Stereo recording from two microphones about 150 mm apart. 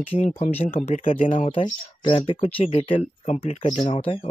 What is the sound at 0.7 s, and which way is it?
Speech, 55° left (ahead or behind).